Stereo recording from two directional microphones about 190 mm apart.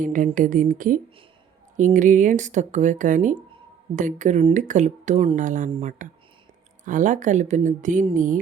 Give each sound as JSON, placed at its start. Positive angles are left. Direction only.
{"t": 0.0, "sound": "speech", "side_deg": -45}